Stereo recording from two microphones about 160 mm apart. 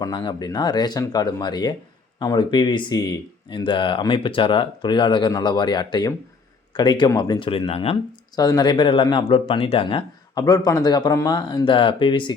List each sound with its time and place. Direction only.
0.0 s speech: 25° left (ahead or behind)
8.4 s speech: 25° left (ahead or behind)
10.3 s speech: 25° left (ahead or behind)